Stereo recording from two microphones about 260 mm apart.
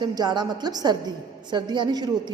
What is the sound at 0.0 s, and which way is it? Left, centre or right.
A woman's voice, centre.